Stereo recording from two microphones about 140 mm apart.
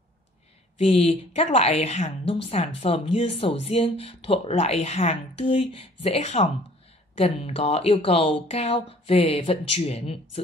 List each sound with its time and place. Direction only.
0.7 s a woman's voice: 45° left (ahead or behind)